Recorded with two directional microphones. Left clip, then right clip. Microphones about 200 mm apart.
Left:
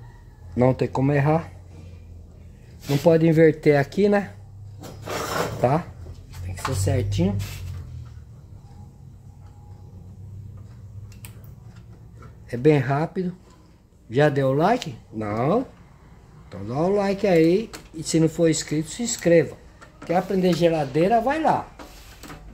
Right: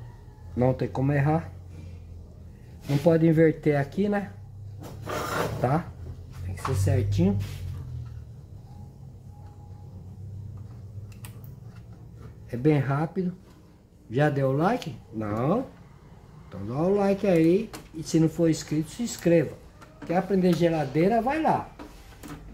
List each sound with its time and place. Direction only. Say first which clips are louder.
0.6 s speech: left 5 dB; 45° left (ahead or behind)
3.0 s speech: left 4 dB; 40° left (ahead or behind)
5.6 s speech: left 5 dB; 40° left (ahead or behind)
12.4 s speech: left 6 dB; 45° left (ahead or behind)